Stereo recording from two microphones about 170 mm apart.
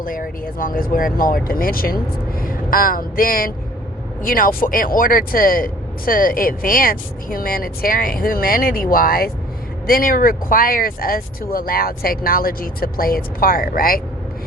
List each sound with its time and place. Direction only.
0.0 s speech: 55° left (ahead or behind)